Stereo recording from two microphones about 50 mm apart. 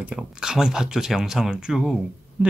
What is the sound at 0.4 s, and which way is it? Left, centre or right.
Speech, centre.